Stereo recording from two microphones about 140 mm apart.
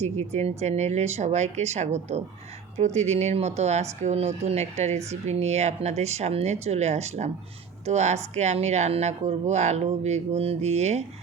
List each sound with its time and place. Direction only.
0.0 s speech: 50° right (ahead or behind)